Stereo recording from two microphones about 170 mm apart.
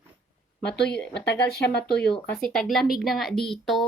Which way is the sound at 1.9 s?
5° left (ahead or behind).